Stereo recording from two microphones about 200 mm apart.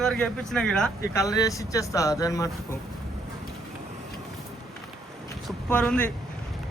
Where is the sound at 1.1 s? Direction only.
15° left (ahead or behind).